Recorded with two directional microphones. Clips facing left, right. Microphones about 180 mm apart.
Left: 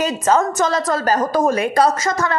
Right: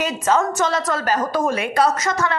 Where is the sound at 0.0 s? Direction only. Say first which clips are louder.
Left 2 dB; 40° left (ahead or behind).